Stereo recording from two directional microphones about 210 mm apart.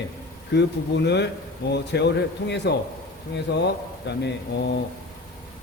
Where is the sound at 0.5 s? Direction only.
55° left (ahead or behind).